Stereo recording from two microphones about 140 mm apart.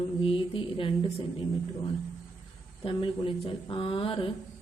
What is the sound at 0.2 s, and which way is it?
Speech, 40° left (ahead or behind).